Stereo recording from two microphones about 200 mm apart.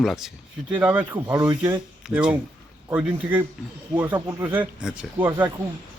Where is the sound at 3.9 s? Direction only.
10° right (ahead or behind).